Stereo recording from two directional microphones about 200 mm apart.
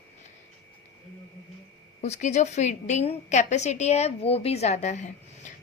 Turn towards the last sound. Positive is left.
turn(degrees=35)  # may be behind; listen again after turning